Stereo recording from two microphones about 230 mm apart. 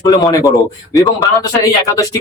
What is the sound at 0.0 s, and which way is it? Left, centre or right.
Speech, centre.